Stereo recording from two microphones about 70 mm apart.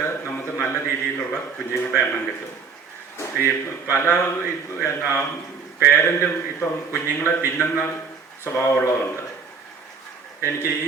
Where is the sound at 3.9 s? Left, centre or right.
Left.